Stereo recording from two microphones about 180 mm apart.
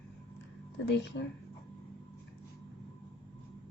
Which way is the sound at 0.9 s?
70° left (ahead or behind).